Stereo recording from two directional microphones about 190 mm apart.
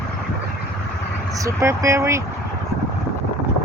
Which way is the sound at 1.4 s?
15° right (ahead or behind).